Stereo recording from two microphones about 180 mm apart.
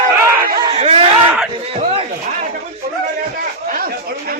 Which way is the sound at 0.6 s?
30° right (ahead or behind).